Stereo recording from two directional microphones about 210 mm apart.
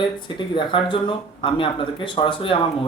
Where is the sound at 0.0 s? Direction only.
25° left (ahead or behind).